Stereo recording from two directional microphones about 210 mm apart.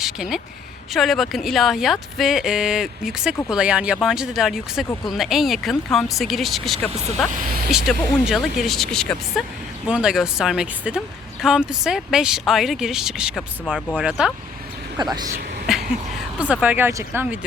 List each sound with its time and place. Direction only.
0.0 s speech: centre (ahead or behind)
6.9 s speech: 30° right (ahead or behind)
7.7 s speech: centre (ahead or behind)
14.9 s speech: 20° right (ahead or behind)
15.7 s a sound: centre (ahead or behind)
16.4 s speech: 5° right (ahead or behind)